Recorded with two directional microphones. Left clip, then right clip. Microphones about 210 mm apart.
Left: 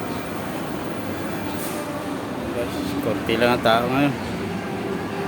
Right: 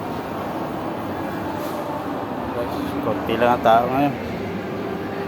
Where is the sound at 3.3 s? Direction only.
20° left (ahead or behind).